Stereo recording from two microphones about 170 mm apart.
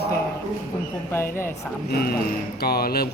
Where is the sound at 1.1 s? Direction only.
15° left (ahead or behind).